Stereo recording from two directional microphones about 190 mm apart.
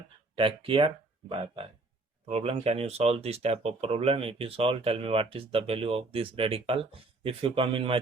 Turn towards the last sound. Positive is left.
turn(degrees=-30)  # may be behind; listen again after turning